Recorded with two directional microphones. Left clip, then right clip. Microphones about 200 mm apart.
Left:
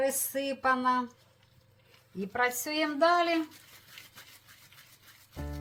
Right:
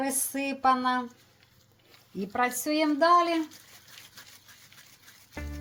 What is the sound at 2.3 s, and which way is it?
Speech, 35° right (ahead or behind).